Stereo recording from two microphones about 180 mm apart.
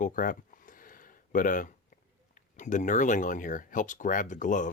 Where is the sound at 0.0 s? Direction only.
50° left (ahead or behind).